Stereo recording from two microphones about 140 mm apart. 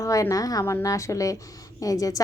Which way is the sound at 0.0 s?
25° left (ahead or behind).